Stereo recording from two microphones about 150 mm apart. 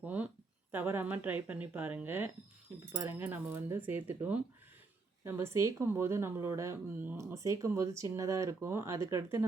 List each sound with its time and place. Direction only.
0.0 s a woman's voice: 10° right (ahead or behind)